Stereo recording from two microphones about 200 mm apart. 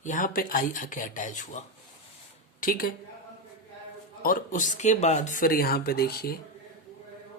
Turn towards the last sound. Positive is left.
turn(degrees=50)  # may be behind; listen again after turning